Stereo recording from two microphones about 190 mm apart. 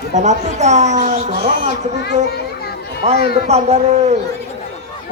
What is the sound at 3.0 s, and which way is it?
Speech, 35° right (ahead or behind).